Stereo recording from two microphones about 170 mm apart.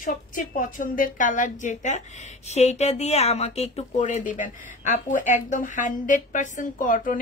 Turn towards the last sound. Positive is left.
turn(degrees=50)  # may be behind; listen again after turning